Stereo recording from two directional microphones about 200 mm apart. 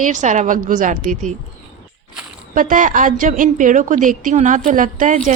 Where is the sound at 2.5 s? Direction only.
40° right (ahead or behind).